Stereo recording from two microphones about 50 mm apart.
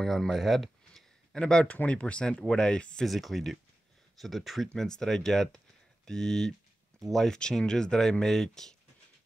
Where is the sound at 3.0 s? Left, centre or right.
Centre.